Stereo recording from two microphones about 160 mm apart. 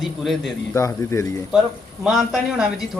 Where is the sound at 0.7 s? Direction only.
15° left (ahead or behind).